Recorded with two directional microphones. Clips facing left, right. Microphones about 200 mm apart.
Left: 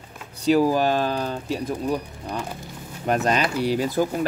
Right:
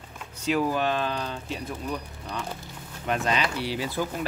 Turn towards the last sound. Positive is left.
turn(degrees=45)  # may be behind; listen again after turning